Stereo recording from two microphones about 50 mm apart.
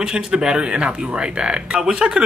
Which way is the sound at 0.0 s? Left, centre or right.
Centre.